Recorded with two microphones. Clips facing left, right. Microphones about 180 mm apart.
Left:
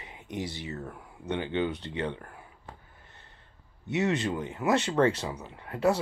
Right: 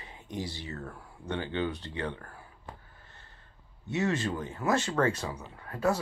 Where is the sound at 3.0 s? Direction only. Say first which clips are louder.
Left 1 dB; 20° left (ahead or behind).